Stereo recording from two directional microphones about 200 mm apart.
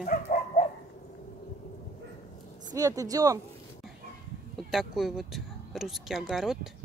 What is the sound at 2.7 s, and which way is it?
Speech, 15° right (ahead or behind).